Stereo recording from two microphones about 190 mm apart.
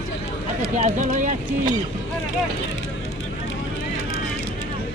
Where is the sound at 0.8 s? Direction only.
40° right (ahead or behind).